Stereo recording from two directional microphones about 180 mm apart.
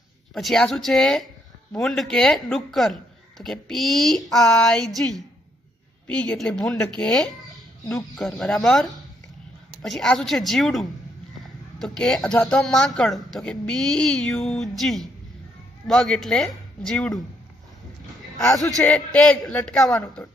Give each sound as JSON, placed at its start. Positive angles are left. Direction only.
{"t": 0.3, "sound": "speech", "side_deg": 0}
{"t": 18.8, "sound": "speech", "side_deg": 5}
{"t": 19.8, "sound": "speech", "side_deg": 15}